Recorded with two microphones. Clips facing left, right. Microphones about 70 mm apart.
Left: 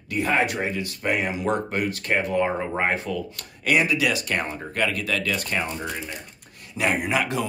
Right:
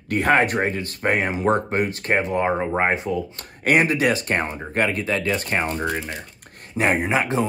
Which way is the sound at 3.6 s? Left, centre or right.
Right.